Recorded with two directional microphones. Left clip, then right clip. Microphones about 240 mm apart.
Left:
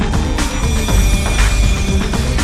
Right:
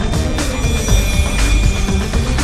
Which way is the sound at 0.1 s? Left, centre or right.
Centre.